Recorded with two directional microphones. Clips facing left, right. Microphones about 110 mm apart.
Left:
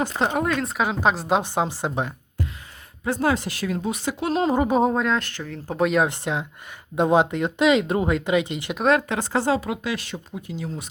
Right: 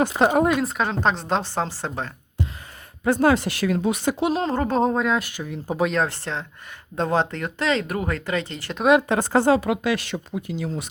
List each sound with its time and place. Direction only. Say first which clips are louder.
0.2 s speech: right 5 dB; 45° right (ahead or behind)
0.6 s speech: even; 5° left (ahead or behind)
2.4 s a sound: right 2 dB; 20° right (ahead or behind)
3.0 s speech: right 4 dB; 60° right (ahead or behind)
4.4 s speech: left 2 dB; 10° left (ahead or behind); by 5.8 s 10° right (ahead or behind)
5.8 s speech: left 3 dB; 5° left (ahead or behind)
9.0 s speech: right 4 dB; 50° right (ahead or behind); by 10.8 s 80° right